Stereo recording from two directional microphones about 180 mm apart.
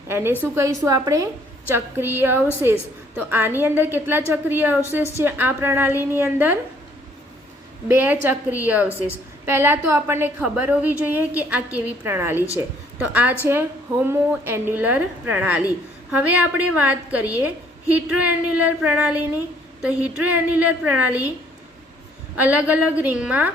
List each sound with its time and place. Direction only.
0.1 s a woman's voice: 10° right (ahead or behind)
7.9 s a woman's voice: 10° right (ahead or behind)
22.4 s a woman's voice: 10° right (ahead or behind)